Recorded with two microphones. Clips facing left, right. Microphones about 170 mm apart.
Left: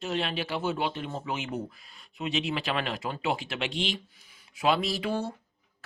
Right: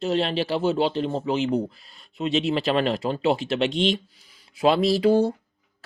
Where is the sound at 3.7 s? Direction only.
5° left (ahead or behind).